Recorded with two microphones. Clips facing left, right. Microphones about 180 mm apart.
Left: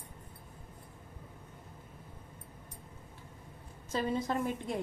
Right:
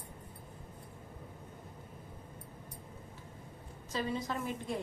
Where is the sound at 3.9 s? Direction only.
50° left (ahead or behind).